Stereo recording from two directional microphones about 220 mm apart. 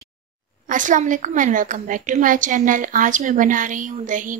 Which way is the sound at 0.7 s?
35° right (ahead or behind).